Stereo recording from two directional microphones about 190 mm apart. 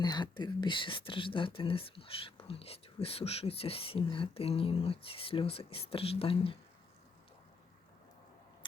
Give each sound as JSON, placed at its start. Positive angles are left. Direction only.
{"t": 0.0, "sound": "speech", "side_deg": 20}